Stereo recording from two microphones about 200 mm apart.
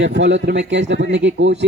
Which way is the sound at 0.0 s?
60° right (ahead or behind).